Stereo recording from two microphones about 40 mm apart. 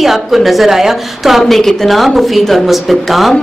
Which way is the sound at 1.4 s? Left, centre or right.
Centre.